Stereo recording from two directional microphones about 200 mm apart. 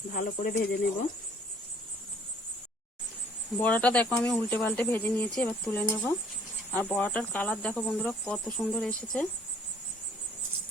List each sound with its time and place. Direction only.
0.1 s speech: 50° left (ahead or behind)
3.6 s speech: 5° left (ahead or behind)